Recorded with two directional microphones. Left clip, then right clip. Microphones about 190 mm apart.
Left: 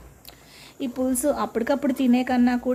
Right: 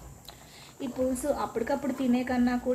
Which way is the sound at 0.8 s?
50° left (ahead or behind).